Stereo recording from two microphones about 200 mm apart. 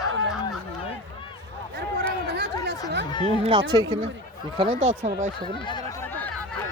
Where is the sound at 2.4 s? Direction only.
55° right (ahead or behind).